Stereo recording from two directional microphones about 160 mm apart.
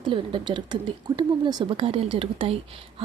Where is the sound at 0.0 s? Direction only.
30° right (ahead or behind).